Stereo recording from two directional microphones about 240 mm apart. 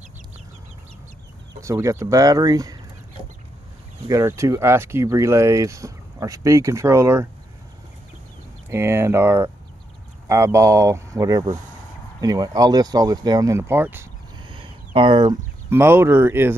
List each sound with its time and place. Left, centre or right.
1.6 s speech: centre
4.1 s speech: centre
8.6 s speech: centre
15.0 s speech: centre